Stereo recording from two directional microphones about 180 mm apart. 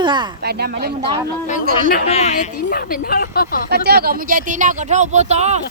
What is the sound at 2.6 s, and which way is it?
A woman's voice, 55° left (ahead or behind).